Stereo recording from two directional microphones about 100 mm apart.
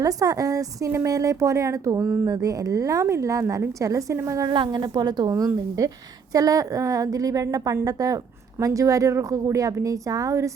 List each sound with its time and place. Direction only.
0.0 s a woman's voice: 35° right (ahead or behind)
4.5 s a woman's voice: 50° right (ahead or behind); by 10.5 s 30° right (ahead or behind)